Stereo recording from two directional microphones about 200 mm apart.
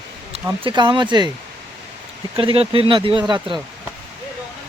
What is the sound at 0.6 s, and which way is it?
Speech, 25° right (ahead or behind).